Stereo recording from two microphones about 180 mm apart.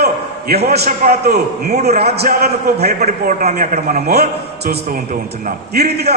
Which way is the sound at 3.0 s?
40° right (ahead or behind).